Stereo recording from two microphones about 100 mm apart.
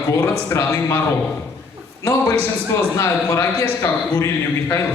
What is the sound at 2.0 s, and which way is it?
Speech, 30° left (ahead or behind).